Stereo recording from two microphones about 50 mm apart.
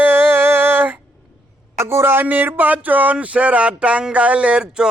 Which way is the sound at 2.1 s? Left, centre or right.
Right.